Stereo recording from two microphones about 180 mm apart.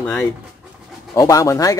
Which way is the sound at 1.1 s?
20° left (ahead or behind).